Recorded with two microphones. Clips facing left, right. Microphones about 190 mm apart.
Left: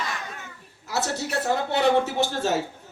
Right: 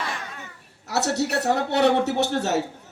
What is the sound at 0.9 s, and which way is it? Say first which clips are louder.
A man's voice: right 4 dB; 70° right (ahead or behind).